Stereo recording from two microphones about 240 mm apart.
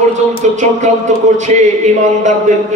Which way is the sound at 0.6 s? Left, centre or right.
Right.